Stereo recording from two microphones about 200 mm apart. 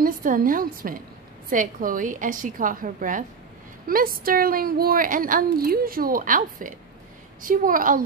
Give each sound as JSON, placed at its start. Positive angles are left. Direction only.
{"t": 0.0, "sound": "a woman's voice", "side_deg": -45}